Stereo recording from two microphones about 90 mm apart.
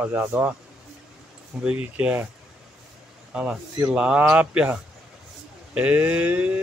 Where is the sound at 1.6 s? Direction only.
15° right (ahead or behind).